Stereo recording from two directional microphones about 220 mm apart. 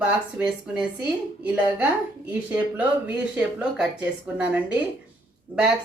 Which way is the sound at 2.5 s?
5° right (ahead or behind).